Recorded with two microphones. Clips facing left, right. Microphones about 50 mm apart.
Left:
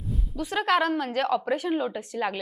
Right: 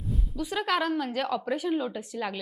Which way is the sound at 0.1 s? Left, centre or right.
Centre.